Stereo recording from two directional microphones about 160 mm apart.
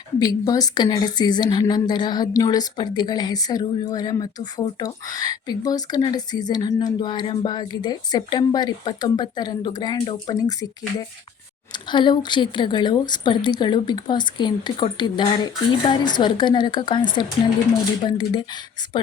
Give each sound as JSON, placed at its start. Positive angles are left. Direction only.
{"t": 0.2, "sound": "speech", "side_deg": 25}
{"t": 11.7, "sound": "speech", "side_deg": 30}